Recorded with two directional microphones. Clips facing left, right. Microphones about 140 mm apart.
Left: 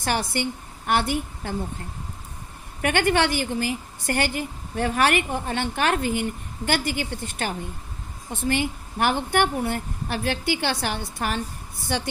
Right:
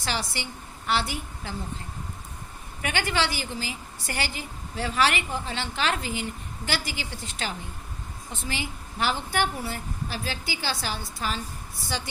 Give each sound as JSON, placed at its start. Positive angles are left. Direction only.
{"t": 0.0, "sound": "a woman's voice", "side_deg": 55}
{"t": 2.8, "sound": "a woman's voice", "side_deg": 55}